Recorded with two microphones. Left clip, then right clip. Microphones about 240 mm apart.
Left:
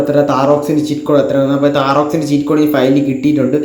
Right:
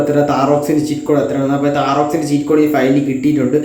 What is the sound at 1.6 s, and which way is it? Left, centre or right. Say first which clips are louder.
Speech: left 2 dB; centre.